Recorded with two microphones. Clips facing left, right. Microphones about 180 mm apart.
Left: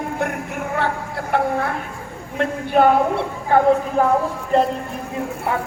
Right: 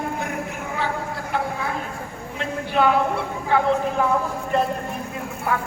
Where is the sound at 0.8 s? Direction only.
60° left (ahead or behind).